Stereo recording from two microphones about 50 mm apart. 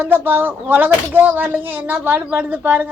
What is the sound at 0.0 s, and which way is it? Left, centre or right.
Speech, right.